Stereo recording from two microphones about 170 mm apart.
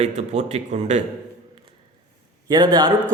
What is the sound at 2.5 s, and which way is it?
Speech, 25° right (ahead or behind).